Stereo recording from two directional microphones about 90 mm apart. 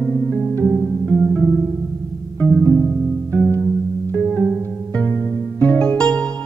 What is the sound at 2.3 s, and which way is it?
Music, 15° left (ahead or behind).